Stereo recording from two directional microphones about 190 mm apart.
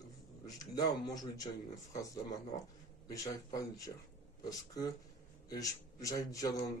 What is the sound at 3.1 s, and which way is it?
A man's voice, 20° left (ahead or behind).